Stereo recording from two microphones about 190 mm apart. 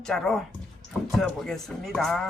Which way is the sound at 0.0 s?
Centre (ahead or behind).